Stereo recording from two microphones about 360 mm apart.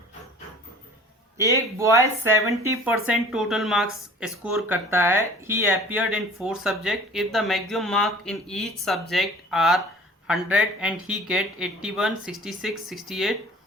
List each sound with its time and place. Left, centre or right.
1.4 s speech: centre